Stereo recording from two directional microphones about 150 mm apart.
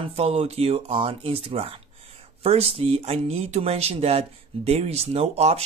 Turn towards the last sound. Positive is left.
turn(degrees=-45)  # may be behind; listen again after turning